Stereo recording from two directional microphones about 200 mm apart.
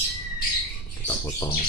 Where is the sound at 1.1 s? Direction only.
15° left (ahead or behind).